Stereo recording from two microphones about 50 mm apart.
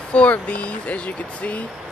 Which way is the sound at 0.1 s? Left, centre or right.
Left.